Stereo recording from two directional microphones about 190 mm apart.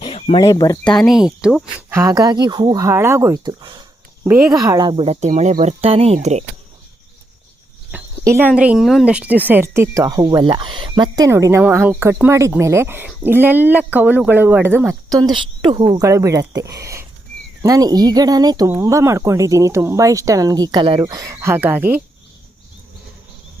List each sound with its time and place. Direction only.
0.0 s a sound: 30° left (ahead or behind)
0.4 s speech: 20° left (ahead or behind)
0.9 s speech: centre (ahead or behind)
1.9 s speech: 15° right (ahead or behind)
4.2 s speech: 5° right (ahead or behind)
4.5 s speech: 20° right (ahead or behind); by 6.4 s 35° right (ahead or behind)
7.9 s speech: 10° right (ahead or behind)